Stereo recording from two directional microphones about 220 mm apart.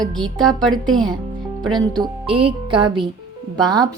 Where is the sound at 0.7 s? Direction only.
Centre (ahead or behind).